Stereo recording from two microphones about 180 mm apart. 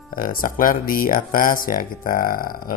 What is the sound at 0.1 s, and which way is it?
Speech, 50° left (ahead or behind).